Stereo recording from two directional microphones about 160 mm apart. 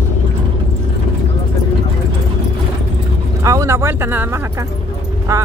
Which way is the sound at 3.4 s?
20° right (ahead or behind).